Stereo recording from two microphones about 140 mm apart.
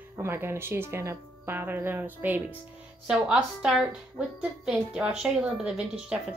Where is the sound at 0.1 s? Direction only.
15° right (ahead or behind).